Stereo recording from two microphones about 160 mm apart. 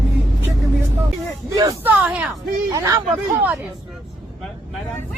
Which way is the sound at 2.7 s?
20° right (ahead or behind).